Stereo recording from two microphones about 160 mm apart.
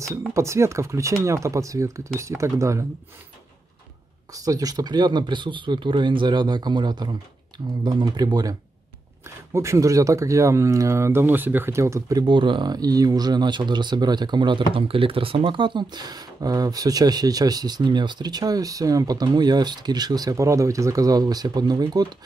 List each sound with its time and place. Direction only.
0.0 s speech: 20° right (ahead or behind)
4.3 s speech: 20° right (ahead or behind)